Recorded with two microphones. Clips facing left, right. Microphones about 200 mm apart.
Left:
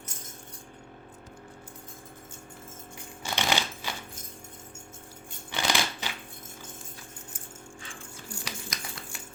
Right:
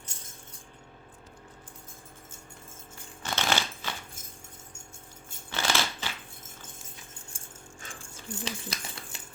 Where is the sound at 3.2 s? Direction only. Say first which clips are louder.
Even; 15° left (ahead or behind).